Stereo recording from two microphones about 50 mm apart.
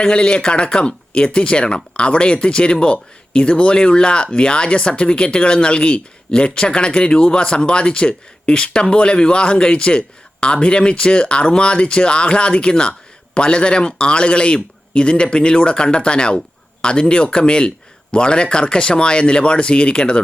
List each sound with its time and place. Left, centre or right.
0.0 s speech: centre